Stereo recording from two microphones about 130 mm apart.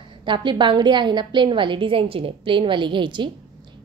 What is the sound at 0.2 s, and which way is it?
A woman's voice, 40° right (ahead or behind).